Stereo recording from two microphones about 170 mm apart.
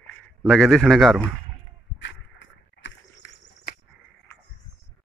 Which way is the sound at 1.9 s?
90° left.